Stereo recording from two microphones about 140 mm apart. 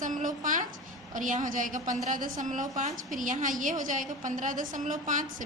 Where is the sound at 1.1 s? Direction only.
70° right (ahead or behind).